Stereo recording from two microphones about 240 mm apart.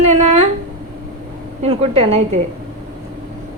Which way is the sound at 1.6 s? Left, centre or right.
Right.